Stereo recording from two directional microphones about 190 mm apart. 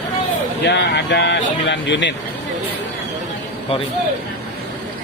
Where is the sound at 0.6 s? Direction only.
60° left (ahead or behind).